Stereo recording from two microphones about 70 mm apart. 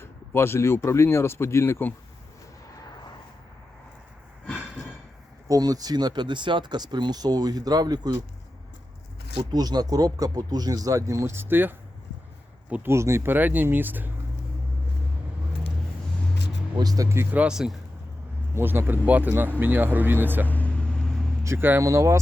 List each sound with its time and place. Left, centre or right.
0.0 s speech: left
5.5 s speech: right
9.5 s speech: right
11.3 s speech: right
12.9 s speech: right
16.7 s speech: right
17.3 s speech: centre
18.5 s speech: right
20.5 s vehicle: left
21.4 s speech: right